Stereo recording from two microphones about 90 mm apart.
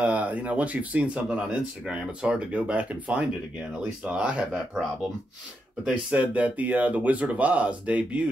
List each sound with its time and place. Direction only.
0.0 s speech: 15° right (ahead or behind)